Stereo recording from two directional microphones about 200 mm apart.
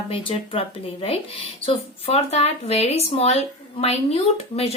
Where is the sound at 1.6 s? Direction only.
30° left (ahead or behind).